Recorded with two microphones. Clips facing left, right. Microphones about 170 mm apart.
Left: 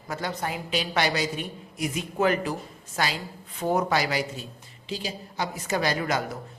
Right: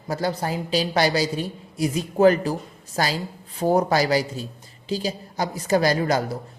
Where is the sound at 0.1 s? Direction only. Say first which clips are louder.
Right 6 dB; 35° right (ahead or behind).